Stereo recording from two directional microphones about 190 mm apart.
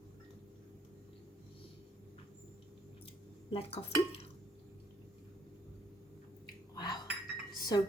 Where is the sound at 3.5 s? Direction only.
30° left (ahead or behind).